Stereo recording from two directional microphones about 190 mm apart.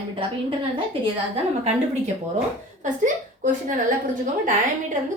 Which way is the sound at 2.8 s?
40° right (ahead or behind).